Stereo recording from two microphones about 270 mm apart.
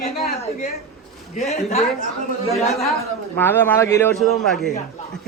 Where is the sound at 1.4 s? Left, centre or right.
Left.